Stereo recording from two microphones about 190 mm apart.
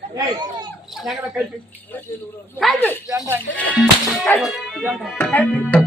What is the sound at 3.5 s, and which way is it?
Speech, 75° left (ahead or behind).